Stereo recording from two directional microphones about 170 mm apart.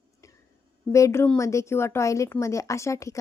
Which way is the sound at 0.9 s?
15° left (ahead or behind).